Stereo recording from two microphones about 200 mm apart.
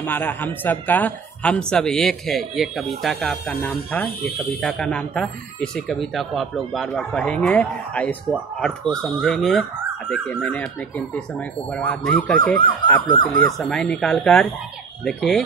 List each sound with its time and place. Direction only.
0.0 s speech: 10° left (ahead or behind)